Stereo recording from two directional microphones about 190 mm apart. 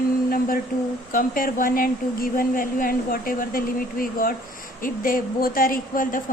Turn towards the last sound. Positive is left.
turn(degrees=45)  # may be behind; listen again after turning